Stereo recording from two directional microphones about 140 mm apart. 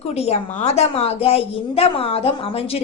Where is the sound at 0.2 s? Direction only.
50° left (ahead or behind).